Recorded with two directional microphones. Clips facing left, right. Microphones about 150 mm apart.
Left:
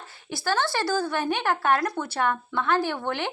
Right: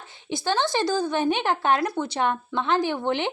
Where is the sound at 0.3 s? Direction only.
20° right (ahead or behind).